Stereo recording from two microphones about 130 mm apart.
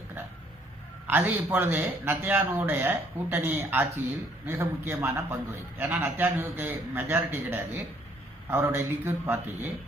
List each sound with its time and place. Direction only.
1.0 s a man's voice: 15° right (ahead or behind)